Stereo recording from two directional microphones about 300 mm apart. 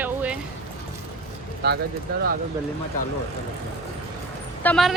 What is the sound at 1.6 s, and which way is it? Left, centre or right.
Speech, right.